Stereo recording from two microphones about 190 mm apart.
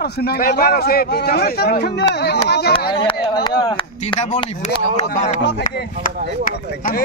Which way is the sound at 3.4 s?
25° left (ahead or behind).